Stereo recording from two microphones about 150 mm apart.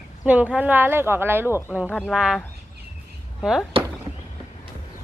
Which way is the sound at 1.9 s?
10° left (ahead or behind).